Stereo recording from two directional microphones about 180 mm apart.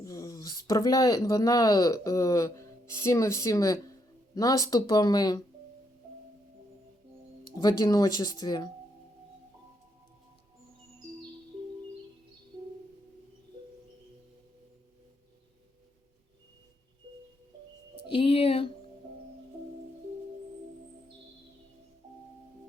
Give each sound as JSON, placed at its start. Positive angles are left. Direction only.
{"t": 0.0, "sound": "speech", "side_deg": 20}
{"t": 7.5, "sound": "speech", "side_deg": 20}
{"t": 18.0, "sound": "music", "side_deg": 30}